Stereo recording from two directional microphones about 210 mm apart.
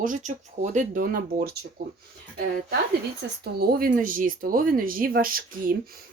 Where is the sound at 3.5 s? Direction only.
45° right (ahead or behind).